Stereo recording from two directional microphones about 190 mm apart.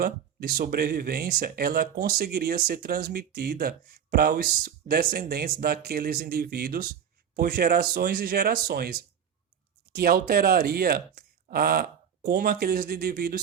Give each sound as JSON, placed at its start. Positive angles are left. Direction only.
{"t": 0.0, "sound": "speech", "side_deg": -50}